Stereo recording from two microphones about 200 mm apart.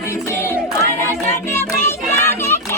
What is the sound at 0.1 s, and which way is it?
Music, 10° left (ahead or behind).